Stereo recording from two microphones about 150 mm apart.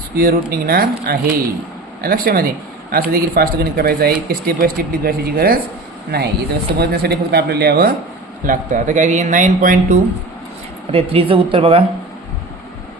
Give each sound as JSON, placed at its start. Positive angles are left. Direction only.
{"t": 0.6, "sound": "speech", "side_deg": -75}
{"t": 8.4, "sound": "speech", "side_deg": -55}
{"t": 10.9, "sound": "speech", "side_deg": -40}